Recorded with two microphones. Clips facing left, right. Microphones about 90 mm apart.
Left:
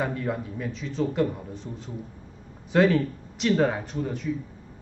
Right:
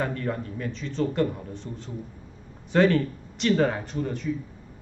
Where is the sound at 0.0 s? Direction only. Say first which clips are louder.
Even; 5° left (ahead or behind).